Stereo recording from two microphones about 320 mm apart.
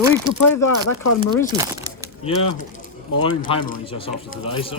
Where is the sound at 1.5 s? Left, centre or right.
Centre.